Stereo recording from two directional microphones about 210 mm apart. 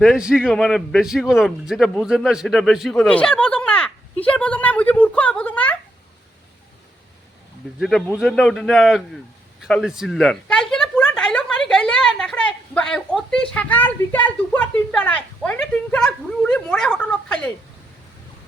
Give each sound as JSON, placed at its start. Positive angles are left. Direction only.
{"t": 0.0, "sound": "speech", "side_deg": 0}
{"t": 7.8, "sound": "speech", "side_deg": 0}